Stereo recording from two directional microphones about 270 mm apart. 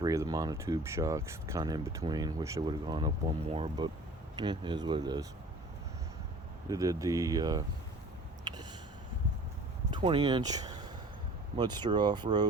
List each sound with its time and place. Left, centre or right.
0.0 s speech: centre
6.7 s speech: centre
8.5 s a sound: centre
9.9 s speech: centre